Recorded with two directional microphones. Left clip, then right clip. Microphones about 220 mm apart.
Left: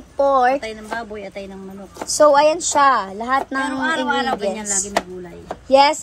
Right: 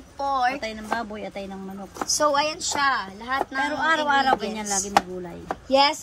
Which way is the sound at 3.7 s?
40° right (ahead or behind).